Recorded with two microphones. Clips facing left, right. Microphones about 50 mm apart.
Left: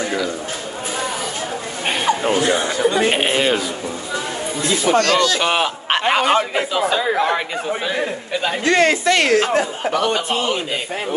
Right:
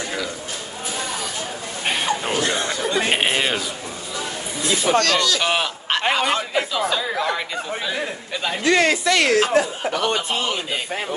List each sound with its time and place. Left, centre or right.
1.9 s a sound: centre
2.5 s speech: centre
3.1 s speech: centre
4.9 s speech: left
5.4 s a man's voice: centre
5.9 s a sound: left
6.2 s a man's voice: left
8.6 s speech: left